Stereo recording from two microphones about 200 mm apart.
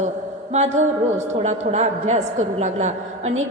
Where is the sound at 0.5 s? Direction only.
35° right (ahead or behind).